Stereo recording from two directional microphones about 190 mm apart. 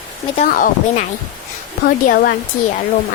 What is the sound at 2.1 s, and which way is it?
Speech, 55° left (ahead or behind).